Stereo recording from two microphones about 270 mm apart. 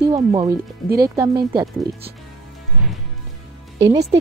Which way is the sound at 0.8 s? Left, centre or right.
Right.